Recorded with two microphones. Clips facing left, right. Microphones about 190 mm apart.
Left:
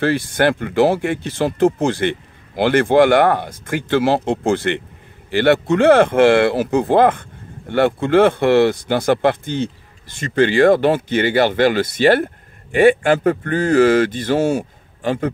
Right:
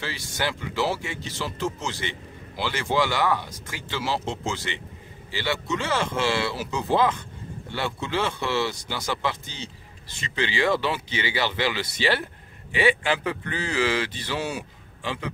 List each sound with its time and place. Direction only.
0.0 s speech: 55° left (ahead or behind)